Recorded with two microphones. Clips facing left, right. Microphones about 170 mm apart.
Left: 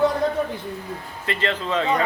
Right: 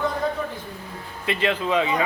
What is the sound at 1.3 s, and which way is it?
Speech, 15° right (ahead or behind).